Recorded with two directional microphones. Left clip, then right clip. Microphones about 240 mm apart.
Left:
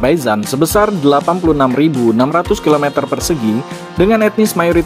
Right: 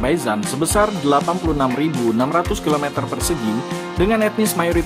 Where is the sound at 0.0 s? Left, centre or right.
Left.